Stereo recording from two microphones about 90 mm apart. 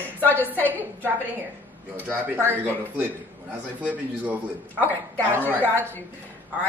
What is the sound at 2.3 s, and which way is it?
A man's voice, 20° right (ahead or behind).